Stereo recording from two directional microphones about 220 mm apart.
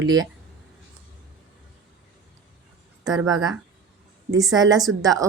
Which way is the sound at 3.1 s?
15° right (ahead or behind).